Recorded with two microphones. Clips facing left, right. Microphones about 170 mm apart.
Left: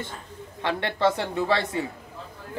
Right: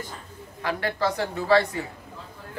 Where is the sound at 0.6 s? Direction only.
25° left (ahead or behind).